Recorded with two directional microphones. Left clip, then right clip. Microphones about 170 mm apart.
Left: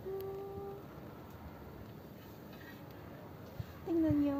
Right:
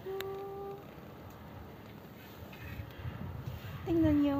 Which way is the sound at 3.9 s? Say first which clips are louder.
Right 3 dB; 50° right (ahead or behind).